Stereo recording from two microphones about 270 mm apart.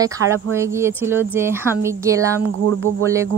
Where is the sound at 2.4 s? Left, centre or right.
Right.